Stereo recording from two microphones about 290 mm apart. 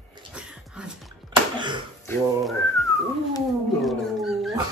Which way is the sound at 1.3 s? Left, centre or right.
Centre.